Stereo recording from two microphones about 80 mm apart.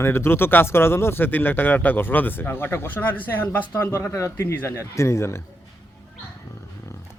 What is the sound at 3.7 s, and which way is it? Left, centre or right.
Speech, left.